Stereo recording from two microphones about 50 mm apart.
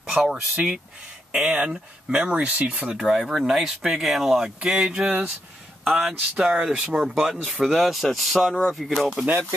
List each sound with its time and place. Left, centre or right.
0.0 s a sound: centre
0.6 s speech: centre
3.0 s speech: centre
4.6 s speech: centre
6.1 s speech: right; by 9.1 s centre